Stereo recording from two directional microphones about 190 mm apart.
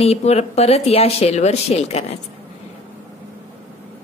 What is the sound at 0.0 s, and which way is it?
A woman's voice, 35° left (ahead or behind).